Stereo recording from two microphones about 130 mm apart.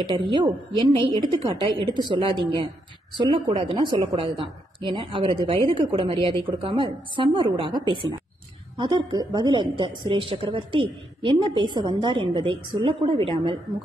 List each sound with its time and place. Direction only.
0.1 s a woman's voice: 35° right (ahead or behind)